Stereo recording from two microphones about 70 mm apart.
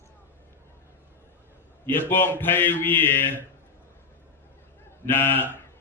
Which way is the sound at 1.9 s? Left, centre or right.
Left.